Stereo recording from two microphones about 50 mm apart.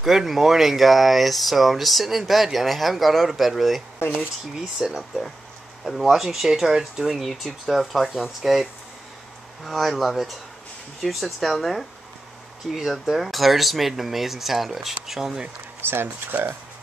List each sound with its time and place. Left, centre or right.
0.0 s speech: centre
9.7 s speech: centre
12.9 s speech: centre
15.9 s speech: right